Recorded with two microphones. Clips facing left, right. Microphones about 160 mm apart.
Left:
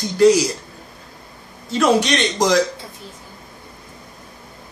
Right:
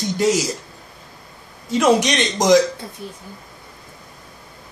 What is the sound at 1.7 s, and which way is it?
Speech, 15° right (ahead or behind).